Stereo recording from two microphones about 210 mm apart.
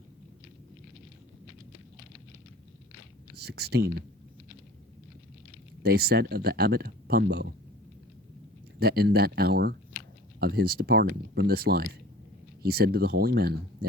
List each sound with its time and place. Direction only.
3.3 s speech: 50° right (ahead or behind)
5.8 s speech: 50° right (ahead or behind)
8.8 s speech: 50° right (ahead or behind)